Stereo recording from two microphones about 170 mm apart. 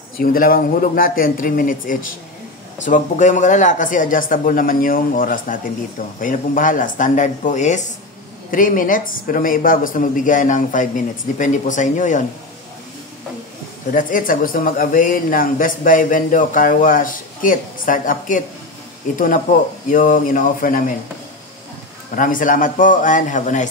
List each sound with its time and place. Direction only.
0.2 s speech: 55° left (ahead or behind)
13.9 s speech: 55° left (ahead or behind)
22.1 s speech: 50° left (ahead or behind)